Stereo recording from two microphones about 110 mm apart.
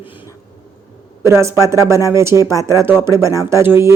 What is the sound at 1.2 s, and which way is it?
Speech, 25° right (ahead or behind).